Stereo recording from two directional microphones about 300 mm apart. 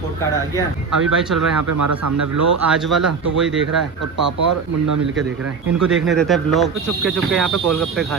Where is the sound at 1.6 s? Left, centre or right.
Right.